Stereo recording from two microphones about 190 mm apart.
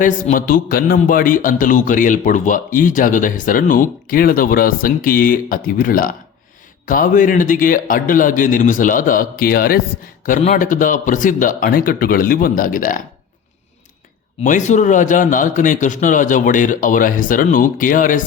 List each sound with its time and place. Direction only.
0.0 s a man's voice: 45° left (ahead or behind)
14.4 s a man's voice: 40° left (ahead or behind)